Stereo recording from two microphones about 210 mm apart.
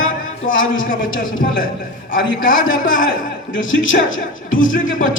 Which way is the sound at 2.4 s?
40° left (ahead or behind).